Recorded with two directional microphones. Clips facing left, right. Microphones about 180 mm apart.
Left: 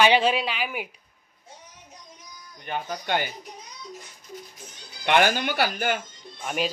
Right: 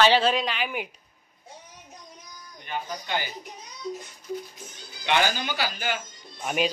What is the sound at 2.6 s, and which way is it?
Speech, 55° left (ahead or behind).